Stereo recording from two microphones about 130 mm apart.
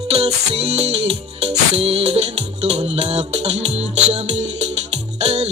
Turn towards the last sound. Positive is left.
turn(degrees=-55)  # may be behind; listen again after turning